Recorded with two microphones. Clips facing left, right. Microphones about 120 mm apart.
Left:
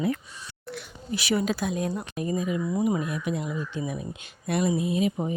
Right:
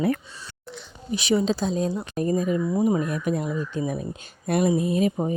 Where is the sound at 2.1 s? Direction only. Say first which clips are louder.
Right 5 dB; 40° right (ahead or behind).